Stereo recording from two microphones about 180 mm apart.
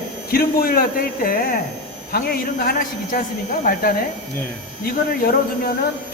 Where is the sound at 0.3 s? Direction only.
55° left (ahead or behind).